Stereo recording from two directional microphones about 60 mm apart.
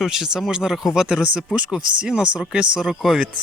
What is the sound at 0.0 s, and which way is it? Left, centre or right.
Speech, centre.